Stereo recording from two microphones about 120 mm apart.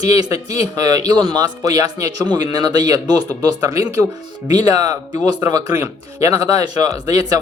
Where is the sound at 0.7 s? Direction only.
30° right (ahead or behind).